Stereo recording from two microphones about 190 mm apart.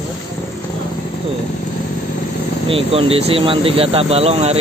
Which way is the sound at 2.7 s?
30° right (ahead or behind).